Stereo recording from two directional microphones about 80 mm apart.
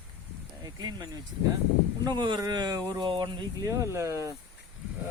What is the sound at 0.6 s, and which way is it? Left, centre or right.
Speech, right.